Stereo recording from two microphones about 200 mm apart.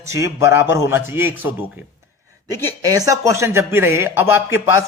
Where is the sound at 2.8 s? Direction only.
20° right (ahead or behind).